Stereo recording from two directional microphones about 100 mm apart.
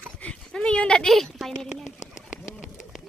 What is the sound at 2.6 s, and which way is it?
Bird, 5° right (ahead or behind).